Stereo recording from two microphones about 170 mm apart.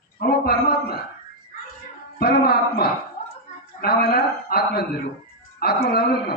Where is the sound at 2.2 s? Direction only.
65° left (ahead or behind).